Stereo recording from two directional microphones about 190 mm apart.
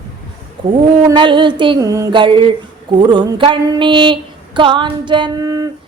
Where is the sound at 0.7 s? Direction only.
25° right (ahead or behind).